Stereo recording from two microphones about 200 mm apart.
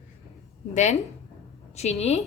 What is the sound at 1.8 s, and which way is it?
Speech, 35° left (ahead or behind).